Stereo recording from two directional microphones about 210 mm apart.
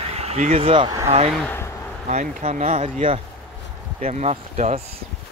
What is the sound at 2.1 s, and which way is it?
Speech, 35° right (ahead or behind).